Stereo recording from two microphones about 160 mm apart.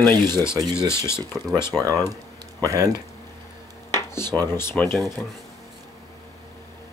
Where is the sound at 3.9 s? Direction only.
15° left (ahead or behind).